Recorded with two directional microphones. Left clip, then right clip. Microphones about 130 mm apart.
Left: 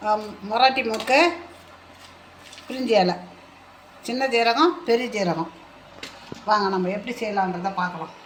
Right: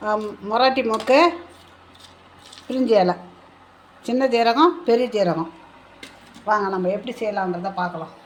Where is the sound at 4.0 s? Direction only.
90° right.